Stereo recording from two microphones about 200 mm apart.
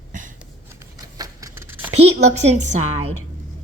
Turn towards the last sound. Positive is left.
turn(degrees=-35)  # may be behind; listen again after turning